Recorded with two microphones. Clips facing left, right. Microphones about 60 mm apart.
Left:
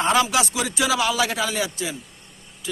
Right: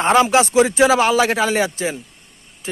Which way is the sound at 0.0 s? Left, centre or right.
Right.